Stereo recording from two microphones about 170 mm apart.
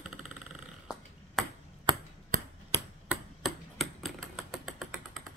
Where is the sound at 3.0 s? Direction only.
Centre (ahead or behind).